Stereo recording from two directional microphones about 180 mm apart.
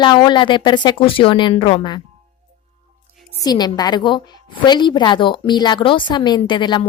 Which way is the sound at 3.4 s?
20° left (ahead or behind).